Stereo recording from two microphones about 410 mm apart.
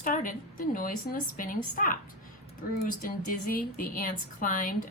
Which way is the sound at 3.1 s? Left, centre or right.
Left.